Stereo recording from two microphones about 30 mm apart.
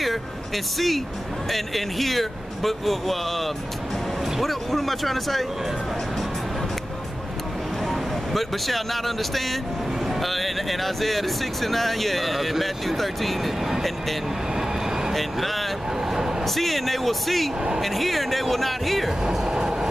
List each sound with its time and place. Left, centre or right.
0.7 s speech: centre
7.9 s speech: centre
15.1 s speech: centre
16.1 s vehicle: centre
16.4 s speech: centre
19.3 s train: centre